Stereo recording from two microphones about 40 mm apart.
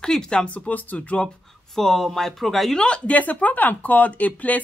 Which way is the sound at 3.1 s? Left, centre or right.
Left.